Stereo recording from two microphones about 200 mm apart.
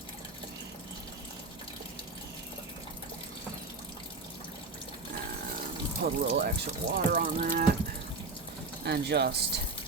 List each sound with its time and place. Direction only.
6.0 s speech: 50° right (ahead or behind)
8.8 s speech: 55° right (ahead or behind)